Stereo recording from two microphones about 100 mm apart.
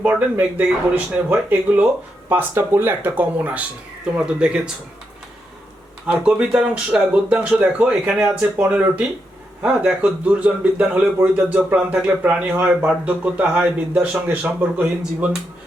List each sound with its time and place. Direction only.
0.0 s speech: 15° right (ahead or behind)
6.1 s speech: 10° right (ahead or behind)